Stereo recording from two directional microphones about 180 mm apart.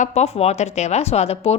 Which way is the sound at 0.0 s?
40° left (ahead or behind).